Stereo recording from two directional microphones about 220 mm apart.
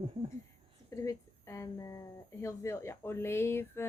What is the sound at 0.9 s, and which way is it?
Speech, 15° left (ahead or behind).